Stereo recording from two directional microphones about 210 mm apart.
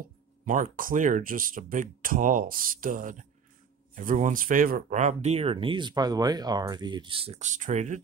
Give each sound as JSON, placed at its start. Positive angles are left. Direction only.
{"t": 0.5, "sound": "speech", "side_deg": -40}